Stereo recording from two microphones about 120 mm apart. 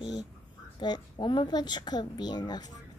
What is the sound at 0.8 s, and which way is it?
A woman's voice, 40° left (ahead or behind).